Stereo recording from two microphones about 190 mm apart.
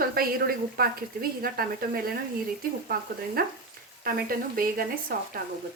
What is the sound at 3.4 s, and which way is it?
A woman's voice, 50° right (ahead or behind).